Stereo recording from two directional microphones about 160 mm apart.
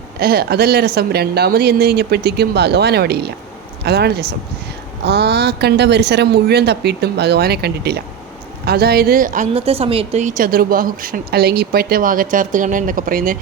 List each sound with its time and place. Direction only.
0.2 s speech: 75° right (ahead or behind); by 9.5 s 55° right (ahead or behind)
9.6 s speech: 35° right (ahead or behind); by 13.3 s 60° right (ahead or behind)